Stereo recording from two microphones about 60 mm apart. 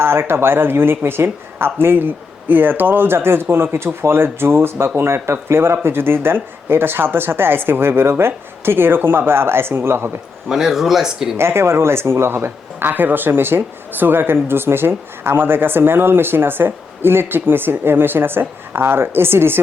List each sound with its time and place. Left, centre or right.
0.0 s speech: right
10.5 s speech: centre
11.3 s speech: right